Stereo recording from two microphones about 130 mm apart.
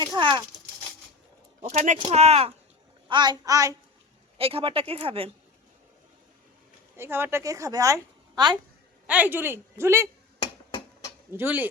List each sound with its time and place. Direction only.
0.0 s a child's voice: 35° right (ahead or behind)
1.6 s speech: 70° right (ahead or behind)
2.0 s speech: 55° right (ahead or behind)
3.1 s speech: 35° right (ahead or behind)
4.4 s speech: 45° right (ahead or behind)
6.9 s speech: 20° right (ahead or behind)
9.0 s a woman's voice: 10° right (ahead or behind)
10.4 s hammer: 30° left (ahead or behind)
11.3 s a woman's voice: 15° right (ahead or behind)